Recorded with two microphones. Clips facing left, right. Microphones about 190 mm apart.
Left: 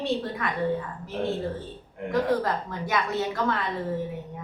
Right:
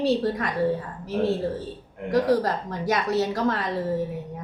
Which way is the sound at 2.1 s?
40° right (ahead or behind).